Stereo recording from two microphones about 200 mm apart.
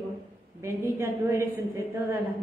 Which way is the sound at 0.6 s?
10° right (ahead or behind).